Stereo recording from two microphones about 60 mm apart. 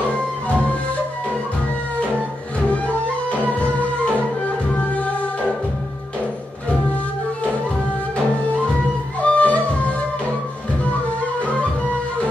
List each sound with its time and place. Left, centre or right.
3.7 s music: left
9.2 s music: left